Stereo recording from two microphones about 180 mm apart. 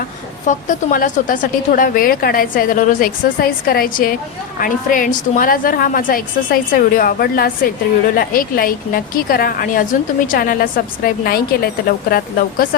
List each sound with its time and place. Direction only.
0.4 s a woman's voice: 45° left (ahead or behind)